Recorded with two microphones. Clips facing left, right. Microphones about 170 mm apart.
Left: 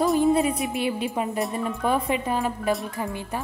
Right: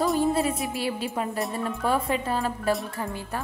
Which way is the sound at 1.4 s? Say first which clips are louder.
Left 2 dB; centre (ahead or behind).